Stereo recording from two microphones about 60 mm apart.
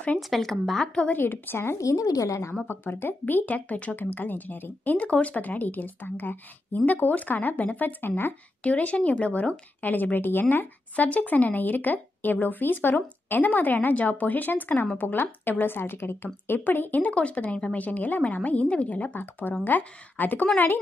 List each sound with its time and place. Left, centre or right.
0.3 s speech: centre
1.1 s speech: left
1.8 s a woman's voice: left
2.6 s speech: left